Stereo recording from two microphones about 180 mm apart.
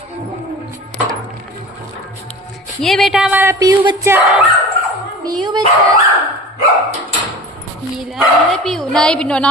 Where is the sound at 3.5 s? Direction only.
20° right (ahead or behind).